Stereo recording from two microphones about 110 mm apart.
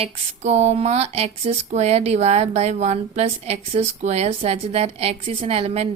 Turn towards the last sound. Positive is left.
turn(degrees=-60)  # may be behind; listen again after turning